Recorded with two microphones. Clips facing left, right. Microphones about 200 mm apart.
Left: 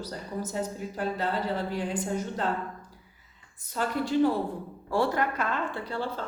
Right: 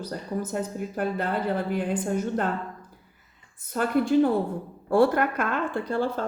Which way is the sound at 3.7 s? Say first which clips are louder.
Right 5 dB; 55° right (ahead or behind).